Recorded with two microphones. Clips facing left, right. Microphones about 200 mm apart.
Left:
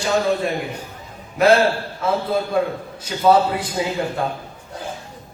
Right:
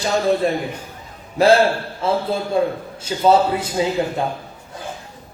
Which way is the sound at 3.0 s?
25° right (ahead or behind).